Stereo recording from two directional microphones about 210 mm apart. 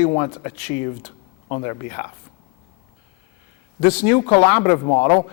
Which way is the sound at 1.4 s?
25° left (ahead or behind).